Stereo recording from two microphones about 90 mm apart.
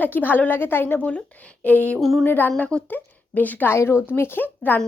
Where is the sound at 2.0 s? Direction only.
Centre (ahead or behind).